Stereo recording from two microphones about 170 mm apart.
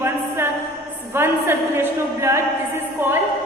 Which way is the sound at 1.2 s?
15° right (ahead or behind).